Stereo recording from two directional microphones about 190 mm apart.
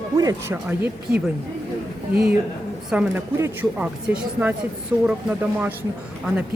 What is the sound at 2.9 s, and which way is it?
A woman's voice, 10° right (ahead or behind).